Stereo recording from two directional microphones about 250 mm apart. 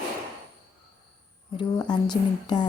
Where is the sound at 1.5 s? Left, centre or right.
Centre.